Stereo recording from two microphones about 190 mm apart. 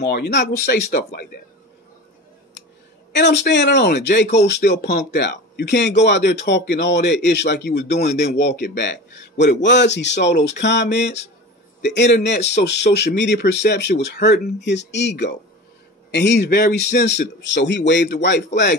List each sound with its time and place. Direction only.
0.0 s a man's voice: 60° left (ahead or behind)
3.2 s a man's voice: 65° left (ahead or behind)